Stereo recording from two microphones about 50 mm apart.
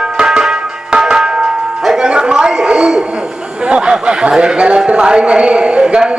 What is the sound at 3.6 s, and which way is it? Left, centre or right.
Speech, centre.